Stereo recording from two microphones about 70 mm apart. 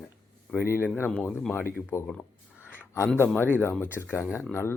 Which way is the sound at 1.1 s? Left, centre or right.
Centre.